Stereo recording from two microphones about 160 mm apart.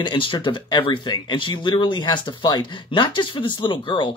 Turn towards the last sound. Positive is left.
turn(degrees=30)  # may be behind; listen again after turning